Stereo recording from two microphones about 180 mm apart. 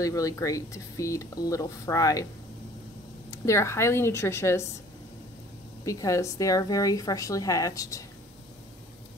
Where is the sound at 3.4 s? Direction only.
15° left (ahead or behind).